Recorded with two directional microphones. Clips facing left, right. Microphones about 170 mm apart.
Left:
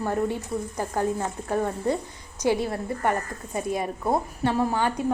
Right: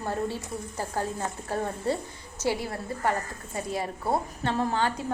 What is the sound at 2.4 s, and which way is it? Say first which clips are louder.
A woman's voice: left 5 dB; 20° left (ahead or behind).